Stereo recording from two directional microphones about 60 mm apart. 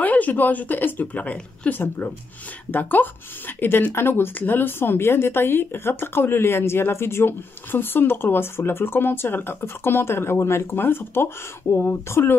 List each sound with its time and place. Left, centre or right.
0.0 s speech: left
1.8 s speech: left
10.8 s speech: left